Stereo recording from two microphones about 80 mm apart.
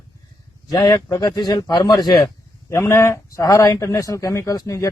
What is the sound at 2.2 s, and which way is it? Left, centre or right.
Speech, left.